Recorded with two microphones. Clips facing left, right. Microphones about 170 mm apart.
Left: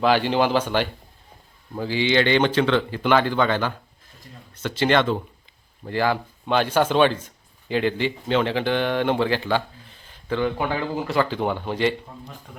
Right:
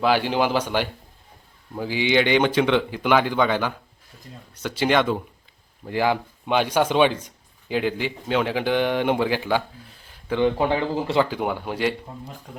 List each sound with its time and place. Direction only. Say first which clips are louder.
0.0 s a man's voice: left 1 dB; 10° right (ahead or behind)
10.4 s speech: right 5 dB; 25° right (ahead or behind)
11.3 s a man's voice: left 1 dB; 10° right (ahead or behind)